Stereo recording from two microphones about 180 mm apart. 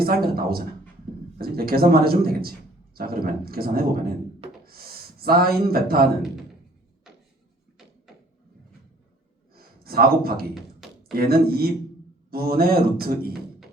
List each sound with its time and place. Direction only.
0.3 s a man's voice: 55° right (ahead or behind)
9.6 s a sound: 55° right (ahead or behind)
11.1 s speech: 55° right (ahead or behind)